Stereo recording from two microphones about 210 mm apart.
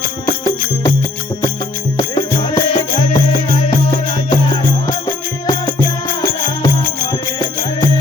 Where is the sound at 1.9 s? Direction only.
20° left (ahead or behind).